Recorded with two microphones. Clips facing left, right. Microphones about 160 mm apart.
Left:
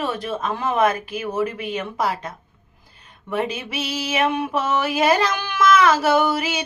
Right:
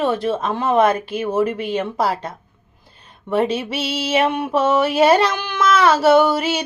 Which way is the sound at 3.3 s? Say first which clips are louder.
Right 6 dB; 30° right (ahead or behind).